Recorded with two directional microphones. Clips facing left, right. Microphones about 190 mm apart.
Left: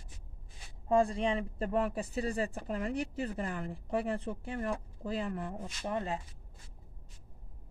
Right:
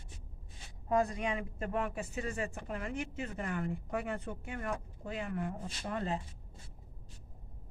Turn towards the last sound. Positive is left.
turn(degrees=20)  # may be behind; listen again after turning